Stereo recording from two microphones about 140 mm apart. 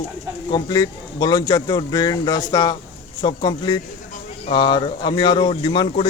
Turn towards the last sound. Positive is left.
turn(degrees=35)  # may be behind; listen again after turning